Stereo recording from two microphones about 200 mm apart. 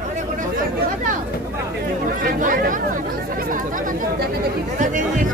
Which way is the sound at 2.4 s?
40° right (ahead or behind).